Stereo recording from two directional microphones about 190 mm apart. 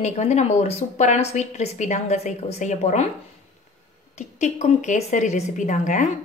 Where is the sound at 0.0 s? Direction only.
35° left (ahead or behind).